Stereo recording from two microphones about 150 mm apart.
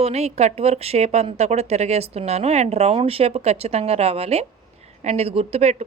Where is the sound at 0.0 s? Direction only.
45° right (ahead or behind).